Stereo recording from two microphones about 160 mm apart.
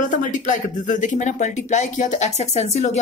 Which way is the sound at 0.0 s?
55° left (ahead or behind).